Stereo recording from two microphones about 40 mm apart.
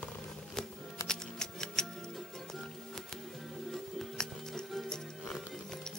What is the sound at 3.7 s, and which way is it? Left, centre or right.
Music, centre.